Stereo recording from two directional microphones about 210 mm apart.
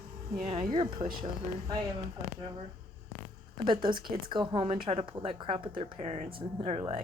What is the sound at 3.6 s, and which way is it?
Speech, 25° right (ahead or behind).